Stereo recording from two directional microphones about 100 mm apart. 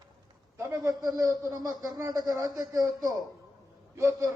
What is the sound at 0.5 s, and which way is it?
Speech, 35° right (ahead or behind).